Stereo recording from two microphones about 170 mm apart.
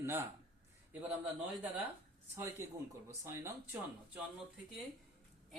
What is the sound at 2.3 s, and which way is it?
Speech, 15° right (ahead or behind).